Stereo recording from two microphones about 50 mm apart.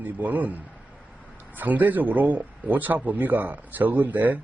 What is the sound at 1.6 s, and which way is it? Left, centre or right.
Speech, right.